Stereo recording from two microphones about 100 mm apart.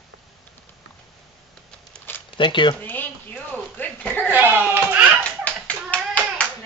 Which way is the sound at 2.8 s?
20° left (ahead or behind).